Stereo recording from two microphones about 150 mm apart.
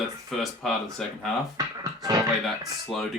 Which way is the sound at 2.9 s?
Centre (ahead or behind).